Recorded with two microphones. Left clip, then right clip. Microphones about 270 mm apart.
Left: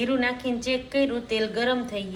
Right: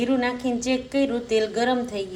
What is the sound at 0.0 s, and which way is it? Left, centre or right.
A woman's voice, right.